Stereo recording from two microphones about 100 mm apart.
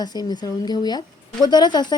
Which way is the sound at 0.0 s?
45° left (ahead or behind).